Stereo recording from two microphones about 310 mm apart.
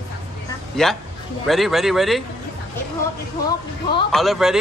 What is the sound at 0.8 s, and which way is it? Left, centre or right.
A man's voice, centre.